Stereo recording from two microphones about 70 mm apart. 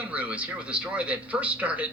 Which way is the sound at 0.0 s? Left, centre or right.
Right.